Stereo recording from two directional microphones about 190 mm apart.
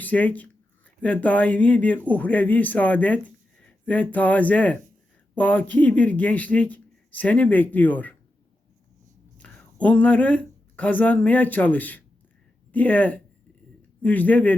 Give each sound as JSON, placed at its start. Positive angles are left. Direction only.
{"t": 0.0, "sound": "speech", "side_deg": 10}
{"t": 9.4, "sound": "speech", "side_deg": 5}